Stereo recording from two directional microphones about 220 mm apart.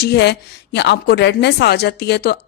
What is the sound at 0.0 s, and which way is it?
A woman's voice, 50° left (ahead or behind).